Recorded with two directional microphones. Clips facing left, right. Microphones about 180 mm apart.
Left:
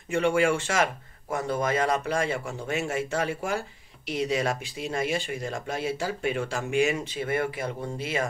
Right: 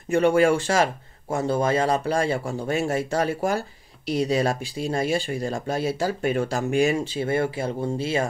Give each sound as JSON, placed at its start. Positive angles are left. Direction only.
{"t": 0.1, "sound": "a man's voice", "side_deg": -40}